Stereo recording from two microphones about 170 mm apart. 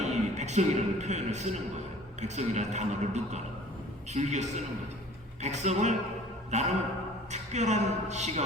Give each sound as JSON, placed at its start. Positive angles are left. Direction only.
{"t": 0.0, "sound": "a man's voice", "side_deg": -45}